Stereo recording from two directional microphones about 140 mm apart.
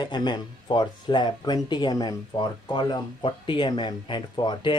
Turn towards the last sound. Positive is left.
turn(degrees=35)  # may be behind; listen again after turning